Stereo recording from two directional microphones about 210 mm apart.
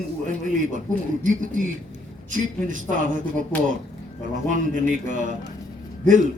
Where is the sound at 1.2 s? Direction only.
40° right (ahead or behind).